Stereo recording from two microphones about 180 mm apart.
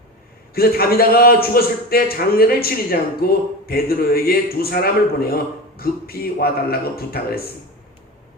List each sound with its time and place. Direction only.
0.5 s a man's voice: 60° left (ahead or behind)